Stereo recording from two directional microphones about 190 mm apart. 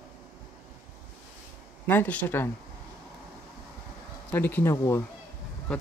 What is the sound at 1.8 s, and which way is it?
Speech, 10° left (ahead or behind).